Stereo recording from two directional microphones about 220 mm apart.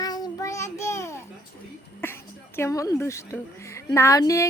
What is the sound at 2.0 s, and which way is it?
Music, 10° left (ahead or behind).